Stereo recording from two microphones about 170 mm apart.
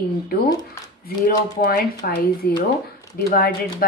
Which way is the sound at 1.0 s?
60° left (ahead or behind).